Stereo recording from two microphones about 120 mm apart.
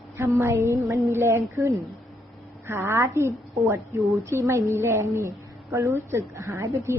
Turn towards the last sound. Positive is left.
turn(degrees=-25)  # may be behind; listen again after turning